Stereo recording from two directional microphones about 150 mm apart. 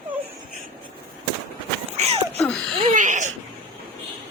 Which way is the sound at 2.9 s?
55° right (ahead or behind).